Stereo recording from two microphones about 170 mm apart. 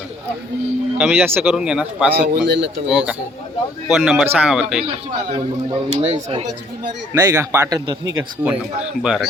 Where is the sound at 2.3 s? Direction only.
90° right.